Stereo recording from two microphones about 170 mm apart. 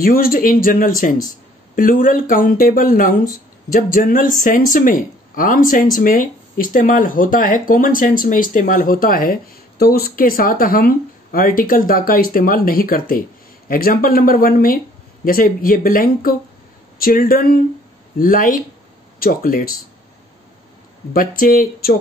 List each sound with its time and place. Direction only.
0.0 s speech: 60° left (ahead or behind)
21.1 s speech: 60° left (ahead or behind)